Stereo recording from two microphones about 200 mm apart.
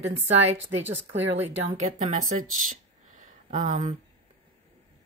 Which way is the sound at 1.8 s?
40° right (ahead or behind).